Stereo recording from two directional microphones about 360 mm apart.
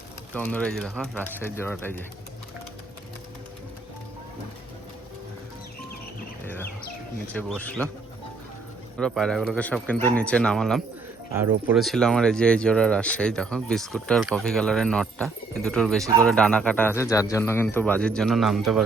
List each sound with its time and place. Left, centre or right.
0.3 s speech: centre
6.4 s chicken: centre
7.3 s speech: centre
9.0 s speech: centre